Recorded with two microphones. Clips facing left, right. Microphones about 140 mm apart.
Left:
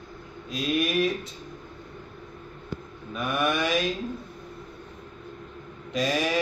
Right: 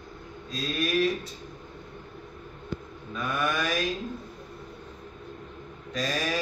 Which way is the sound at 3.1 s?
25° left (ahead or behind).